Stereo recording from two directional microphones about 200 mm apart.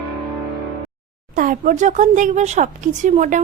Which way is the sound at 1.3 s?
40° right (ahead or behind).